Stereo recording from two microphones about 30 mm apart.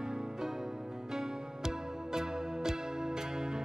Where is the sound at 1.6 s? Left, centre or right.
Right.